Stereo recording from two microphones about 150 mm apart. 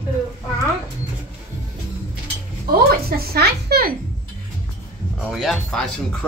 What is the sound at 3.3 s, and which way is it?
Speech, 90° right.